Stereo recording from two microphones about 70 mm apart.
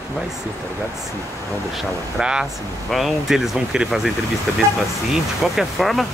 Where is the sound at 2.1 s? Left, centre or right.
Centre.